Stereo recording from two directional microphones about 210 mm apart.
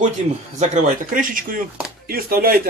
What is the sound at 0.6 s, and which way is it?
Speech, 40° right (ahead or behind).